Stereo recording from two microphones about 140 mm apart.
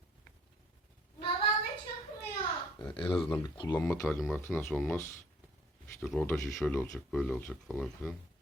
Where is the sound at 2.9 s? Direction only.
40° left (ahead or behind).